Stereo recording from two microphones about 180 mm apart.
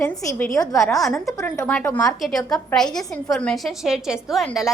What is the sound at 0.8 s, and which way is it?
Speech, centre (ahead or behind).